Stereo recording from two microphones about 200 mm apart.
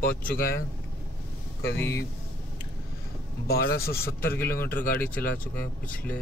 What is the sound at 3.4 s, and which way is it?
Speech, 50° left (ahead or behind).